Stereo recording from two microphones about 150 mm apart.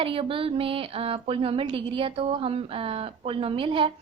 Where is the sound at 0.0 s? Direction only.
35° right (ahead or behind).